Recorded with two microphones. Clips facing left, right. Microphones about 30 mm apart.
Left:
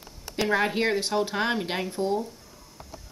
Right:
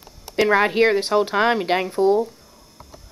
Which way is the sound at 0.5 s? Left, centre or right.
Right.